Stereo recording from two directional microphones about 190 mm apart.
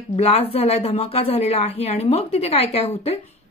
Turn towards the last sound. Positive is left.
turn(degrees=30)  # may be behind; listen again after turning